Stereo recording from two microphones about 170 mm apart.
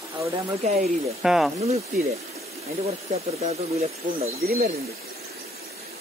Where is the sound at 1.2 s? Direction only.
Centre (ahead or behind).